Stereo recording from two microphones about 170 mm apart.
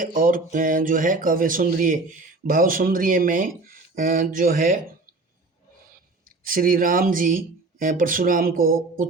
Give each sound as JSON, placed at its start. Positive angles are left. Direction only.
{"t": 0.0, "sound": "speech", "side_deg": -50}
{"t": 6.2, "sound": "speech", "side_deg": -55}